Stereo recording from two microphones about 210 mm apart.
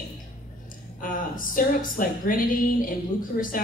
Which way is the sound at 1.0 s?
40° left (ahead or behind).